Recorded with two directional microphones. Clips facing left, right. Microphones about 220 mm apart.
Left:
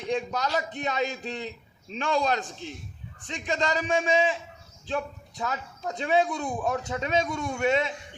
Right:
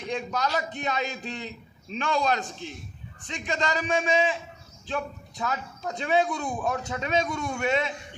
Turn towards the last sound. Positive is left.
turn(degrees=25)  # may be behind; listen again after turning